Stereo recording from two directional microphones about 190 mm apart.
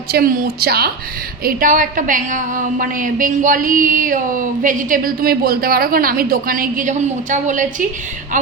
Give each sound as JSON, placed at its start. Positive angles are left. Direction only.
{"t": 0.1, "sound": "a woman's voice", "side_deg": -50}